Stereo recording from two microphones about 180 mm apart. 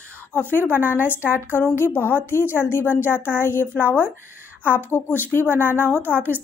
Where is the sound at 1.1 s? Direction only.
15° left (ahead or behind).